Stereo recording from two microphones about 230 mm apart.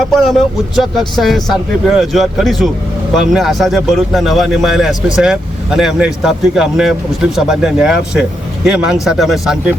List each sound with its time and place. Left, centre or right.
0.1 s a man's voice: centre